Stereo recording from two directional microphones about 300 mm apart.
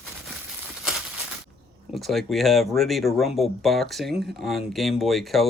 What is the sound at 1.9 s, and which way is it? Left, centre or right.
Speech, centre.